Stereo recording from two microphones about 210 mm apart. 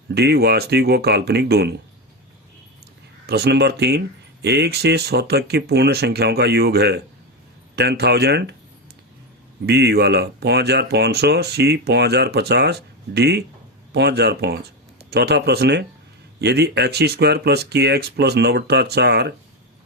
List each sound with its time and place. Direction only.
0.1 s speech: 50° right (ahead or behind)
3.2 s speech: 50° right (ahead or behind)
9.6 s speech: 50° right (ahead or behind)